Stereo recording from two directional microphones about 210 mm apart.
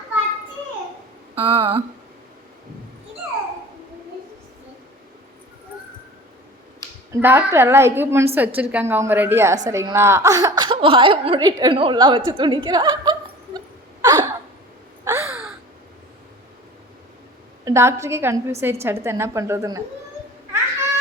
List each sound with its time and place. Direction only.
1.4 s speech: 25° right (ahead or behind)
7.1 s a woman's voice: 10° right (ahead or behind)
14.0 s a sound: 20° right (ahead or behind)
15.0 s caw: 15° right (ahead or behind)
17.7 s a woman's voice: 15° right (ahead or behind)